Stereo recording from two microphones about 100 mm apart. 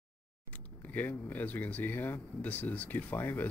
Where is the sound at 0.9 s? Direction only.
15° left (ahead or behind).